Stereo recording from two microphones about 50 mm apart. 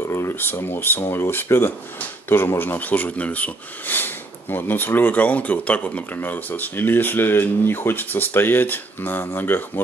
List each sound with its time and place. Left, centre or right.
0.1 s a sound: left
0.4 s speech: left
1.0 s speech: left